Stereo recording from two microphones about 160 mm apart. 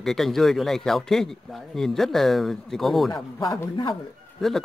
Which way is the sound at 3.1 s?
30° left (ahead or behind).